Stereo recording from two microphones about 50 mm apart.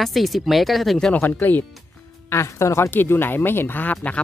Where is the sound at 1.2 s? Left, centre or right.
Left.